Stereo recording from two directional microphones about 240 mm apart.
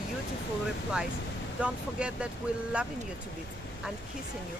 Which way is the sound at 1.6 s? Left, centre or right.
Centre.